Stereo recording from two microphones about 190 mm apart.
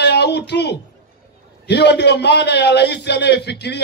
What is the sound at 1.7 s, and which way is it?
A man's voice, 65° left (ahead or behind).